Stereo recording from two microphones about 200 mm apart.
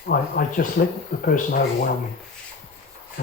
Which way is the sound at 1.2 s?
45° left (ahead or behind).